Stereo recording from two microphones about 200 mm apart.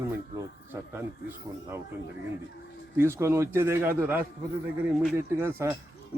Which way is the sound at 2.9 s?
10° right (ahead or behind).